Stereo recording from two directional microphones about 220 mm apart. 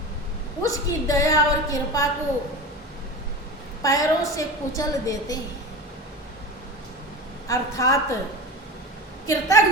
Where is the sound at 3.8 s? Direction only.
15° left (ahead or behind).